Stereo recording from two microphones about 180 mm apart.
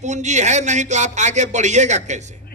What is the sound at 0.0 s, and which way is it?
A man's voice, 40° right (ahead or behind).